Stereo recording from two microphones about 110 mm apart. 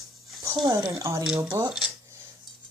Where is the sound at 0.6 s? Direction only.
25° right (ahead or behind).